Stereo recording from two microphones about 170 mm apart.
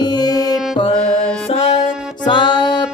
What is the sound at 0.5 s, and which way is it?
Music, centre (ahead or behind).